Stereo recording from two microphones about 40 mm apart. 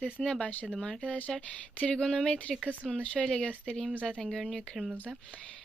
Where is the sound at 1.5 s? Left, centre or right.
Left.